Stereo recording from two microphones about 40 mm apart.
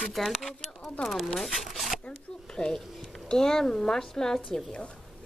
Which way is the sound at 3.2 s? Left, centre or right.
Centre.